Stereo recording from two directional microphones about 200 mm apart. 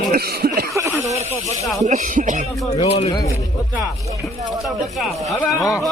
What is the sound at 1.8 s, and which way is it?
Speech, 40° right (ahead or behind).